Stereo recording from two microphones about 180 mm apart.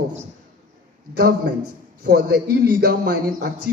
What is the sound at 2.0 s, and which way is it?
A man's voice, 60° right (ahead or behind).